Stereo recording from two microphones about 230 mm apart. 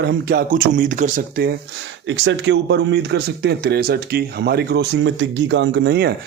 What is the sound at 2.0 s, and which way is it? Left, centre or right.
Speech, right.